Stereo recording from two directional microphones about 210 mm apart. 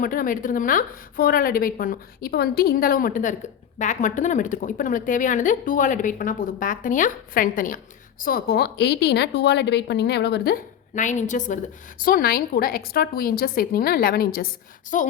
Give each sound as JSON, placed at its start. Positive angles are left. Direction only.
{"t": 0.0, "sound": "a woman's voice", "side_deg": 40}